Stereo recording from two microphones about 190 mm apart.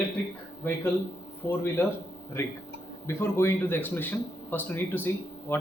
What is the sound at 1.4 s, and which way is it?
Speech, 10° left (ahead or behind).